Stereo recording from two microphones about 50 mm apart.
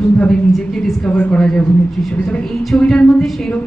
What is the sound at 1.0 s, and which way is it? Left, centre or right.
Speech, left.